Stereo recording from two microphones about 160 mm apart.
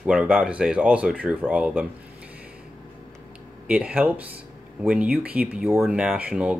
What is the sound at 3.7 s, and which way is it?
Speech, 5° right (ahead or behind).